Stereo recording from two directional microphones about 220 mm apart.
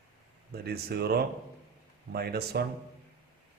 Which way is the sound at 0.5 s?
45° right (ahead or behind).